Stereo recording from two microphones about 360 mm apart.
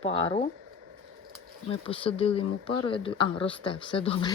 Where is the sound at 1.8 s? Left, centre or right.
Centre.